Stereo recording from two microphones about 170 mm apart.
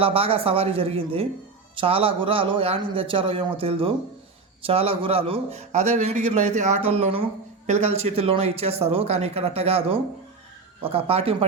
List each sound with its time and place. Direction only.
0.0 s a man's voice: 35° right (ahead or behind)